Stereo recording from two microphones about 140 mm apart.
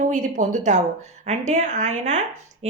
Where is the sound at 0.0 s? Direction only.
65° right (ahead or behind).